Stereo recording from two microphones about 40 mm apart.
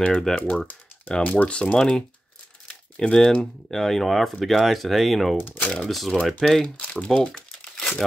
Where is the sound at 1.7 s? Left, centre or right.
Centre.